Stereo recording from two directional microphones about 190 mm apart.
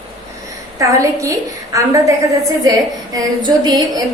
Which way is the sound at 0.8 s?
15° right (ahead or behind).